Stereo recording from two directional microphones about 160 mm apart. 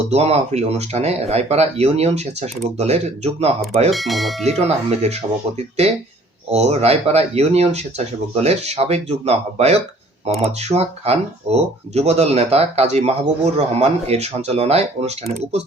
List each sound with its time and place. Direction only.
0.1 s speech: 40° right (ahead or behind)
3.9 s speech: centre (ahead or behind)
4.5 s speech: 40° right (ahead or behind)